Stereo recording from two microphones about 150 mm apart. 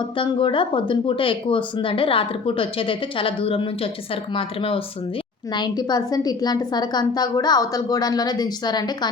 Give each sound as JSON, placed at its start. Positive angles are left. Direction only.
{"t": 0.0, "sound": "a woman's voice", "side_deg": 35}